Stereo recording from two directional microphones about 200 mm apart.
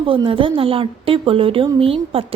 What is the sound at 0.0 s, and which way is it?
A woman's voice, 25° right (ahead or behind).